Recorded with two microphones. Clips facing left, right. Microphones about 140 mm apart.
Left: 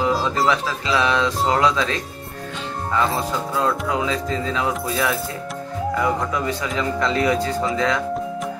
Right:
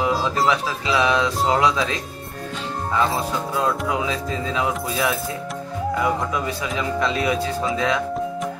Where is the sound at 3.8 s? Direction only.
15° right (ahead or behind).